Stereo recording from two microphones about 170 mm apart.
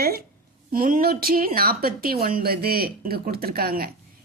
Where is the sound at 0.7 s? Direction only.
55° right (ahead or behind).